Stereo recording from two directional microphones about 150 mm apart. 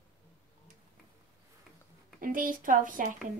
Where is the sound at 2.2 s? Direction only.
65° right (ahead or behind).